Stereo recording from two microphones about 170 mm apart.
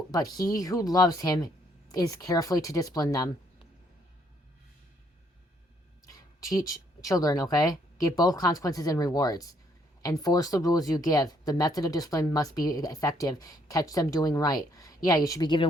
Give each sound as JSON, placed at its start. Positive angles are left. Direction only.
{"t": 0.1, "sound": "speech", "side_deg": 20}
{"t": 6.4, "sound": "speech", "side_deg": 20}